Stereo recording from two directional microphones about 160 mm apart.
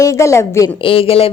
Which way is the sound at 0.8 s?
35° left (ahead or behind).